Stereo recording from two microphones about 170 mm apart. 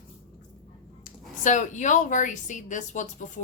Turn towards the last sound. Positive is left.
turn(degrees=45)  # may be behind; listen again after turning